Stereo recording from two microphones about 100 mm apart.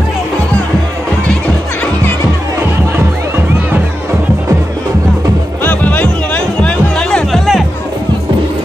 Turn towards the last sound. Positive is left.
turn(degrees=5)  # may be behind; listen again after turning